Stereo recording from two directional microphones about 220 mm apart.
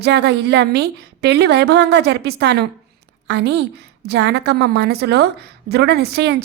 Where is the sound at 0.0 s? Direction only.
50° right (ahead or behind).